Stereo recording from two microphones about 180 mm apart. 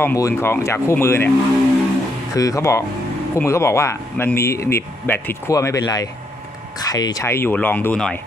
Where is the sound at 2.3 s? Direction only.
20° left (ahead or behind).